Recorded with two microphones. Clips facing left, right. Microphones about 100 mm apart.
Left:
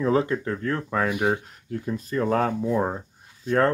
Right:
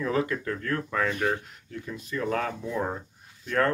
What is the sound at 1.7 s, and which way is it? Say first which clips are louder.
Speech: left 7 dB; 40° left (ahead or behind).